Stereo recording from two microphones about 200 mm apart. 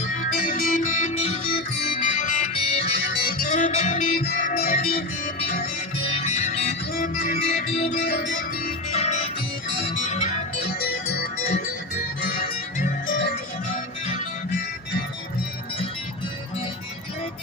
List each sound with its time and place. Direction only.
0.3 s music: 45° left (ahead or behind)
3.1 s music: 45° left (ahead or behind)
6.1 s music: 35° left (ahead or behind)
6.9 s music: 45° left (ahead or behind)
8.1 s music: 65° left (ahead or behind)
8.4 s music: 35° left (ahead or behind)